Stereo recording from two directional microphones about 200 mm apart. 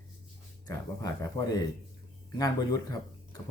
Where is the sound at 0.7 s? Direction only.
15° left (ahead or behind).